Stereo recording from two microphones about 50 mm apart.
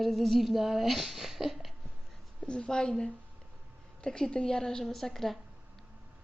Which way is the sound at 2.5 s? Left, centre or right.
Centre.